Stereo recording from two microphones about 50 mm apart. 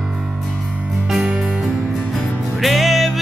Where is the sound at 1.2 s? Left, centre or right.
Centre.